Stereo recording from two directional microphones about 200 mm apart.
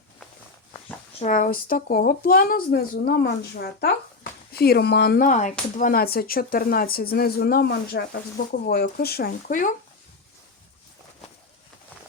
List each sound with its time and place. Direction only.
1.2 s speech: 40° left (ahead or behind)
5.3 s speech: 40° left (ahead or behind)